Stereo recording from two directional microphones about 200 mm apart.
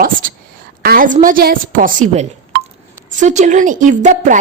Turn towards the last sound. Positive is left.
turn(degrees=-40)  # may be behind; listen again after turning